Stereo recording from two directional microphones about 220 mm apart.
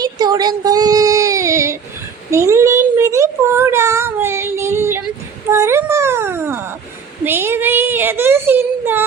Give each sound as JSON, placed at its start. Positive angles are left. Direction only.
{"t": 0.0, "sound": "child singing", "side_deg": -20}
{"t": 7.3, "sound": "whimper", "side_deg": -10}